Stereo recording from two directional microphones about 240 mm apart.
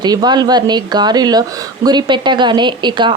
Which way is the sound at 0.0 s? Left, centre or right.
Centre.